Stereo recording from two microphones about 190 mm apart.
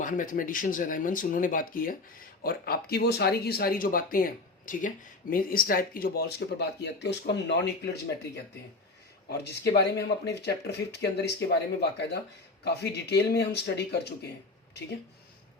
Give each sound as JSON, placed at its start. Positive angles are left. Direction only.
{"t": 0.0, "sound": "speech", "side_deg": 45}
{"t": 9.3, "sound": "speech", "side_deg": 60}